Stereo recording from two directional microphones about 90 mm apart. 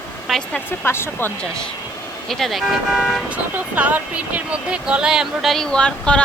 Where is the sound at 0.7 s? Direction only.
30° left (ahead or behind).